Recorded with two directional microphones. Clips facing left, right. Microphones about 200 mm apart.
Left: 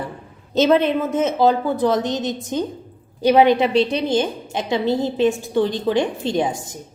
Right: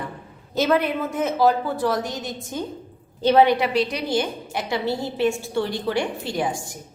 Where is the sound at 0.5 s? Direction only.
20° left (ahead or behind).